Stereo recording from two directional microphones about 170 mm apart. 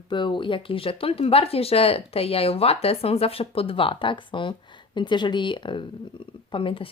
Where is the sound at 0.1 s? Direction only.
30° left (ahead or behind).